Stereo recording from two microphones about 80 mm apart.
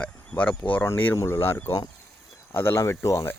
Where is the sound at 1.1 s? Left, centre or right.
Left.